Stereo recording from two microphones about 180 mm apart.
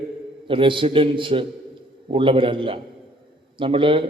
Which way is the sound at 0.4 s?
30° right (ahead or behind).